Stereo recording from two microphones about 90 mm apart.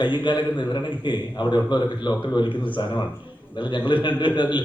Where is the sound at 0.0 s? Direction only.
60° left (ahead or behind).